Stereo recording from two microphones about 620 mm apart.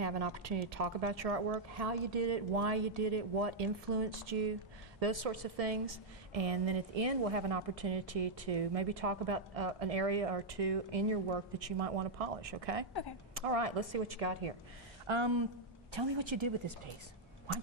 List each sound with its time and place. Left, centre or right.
0.7 s a woman's voice: right
15.0 s a woman's voice: right